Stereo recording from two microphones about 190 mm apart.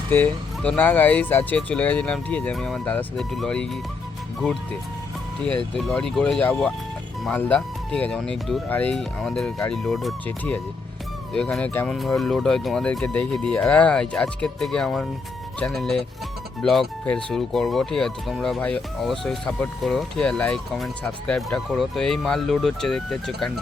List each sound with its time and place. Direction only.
0.1 s speech: 10° left (ahead or behind)